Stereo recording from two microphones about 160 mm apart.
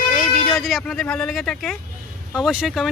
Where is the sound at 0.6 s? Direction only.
Centre (ahead or behind).